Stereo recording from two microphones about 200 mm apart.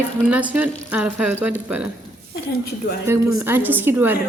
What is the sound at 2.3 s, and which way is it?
Speech, 55° left (ahead or behind).